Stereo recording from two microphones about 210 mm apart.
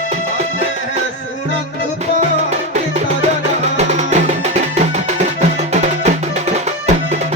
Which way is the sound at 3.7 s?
30° right (ahead or behind).